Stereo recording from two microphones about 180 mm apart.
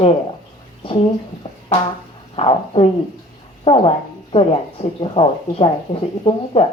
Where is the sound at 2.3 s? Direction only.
35° left (ahead or behind).